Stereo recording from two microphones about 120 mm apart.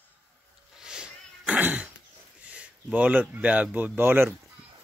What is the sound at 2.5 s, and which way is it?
Speech, 10° right (ahead or behind).